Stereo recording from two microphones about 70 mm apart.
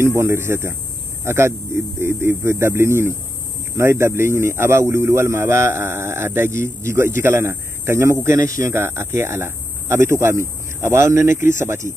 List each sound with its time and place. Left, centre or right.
0.0 s a man's voice: right
8.7 s a man's voice: right